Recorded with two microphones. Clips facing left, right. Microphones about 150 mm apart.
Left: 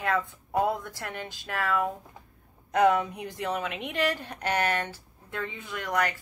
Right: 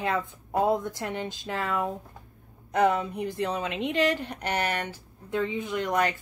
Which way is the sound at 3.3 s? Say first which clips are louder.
Right 2 dB; 15° right (ahead or behind).